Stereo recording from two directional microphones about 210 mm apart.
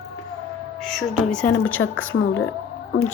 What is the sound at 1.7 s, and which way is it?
Speech, 75° left (ahead or behind).